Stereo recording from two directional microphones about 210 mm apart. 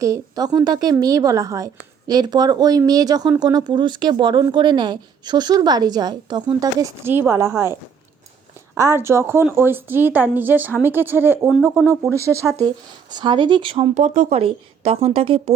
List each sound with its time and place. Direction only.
0.0 s a woman's voice: 15° right (ahead or behind)